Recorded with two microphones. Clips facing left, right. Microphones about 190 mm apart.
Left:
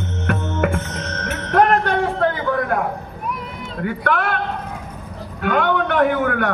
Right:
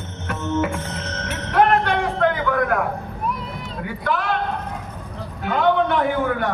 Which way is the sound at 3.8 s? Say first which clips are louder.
Left 3 dB; 60° left (ahead or behind).